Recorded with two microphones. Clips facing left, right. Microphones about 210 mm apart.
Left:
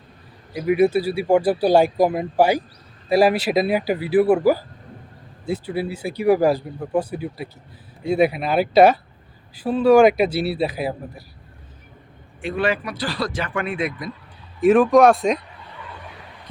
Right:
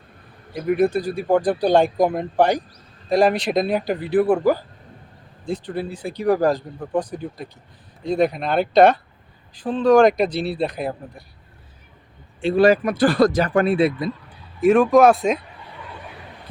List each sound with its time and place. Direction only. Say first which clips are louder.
0.5 s speech: left 2 dB; 5° left (ahead or behind)
12.4 s speech: right 7 dB; 30° right (ahead or behind)
14.6 s speech: even; centre (ahead or behind)